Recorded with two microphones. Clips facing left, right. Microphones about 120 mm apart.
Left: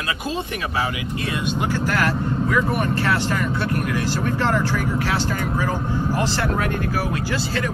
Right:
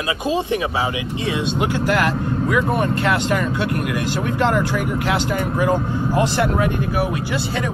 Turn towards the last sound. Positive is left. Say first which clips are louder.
# right 1 dB
turn(degrees=-20)  # may be behind; listen again after turning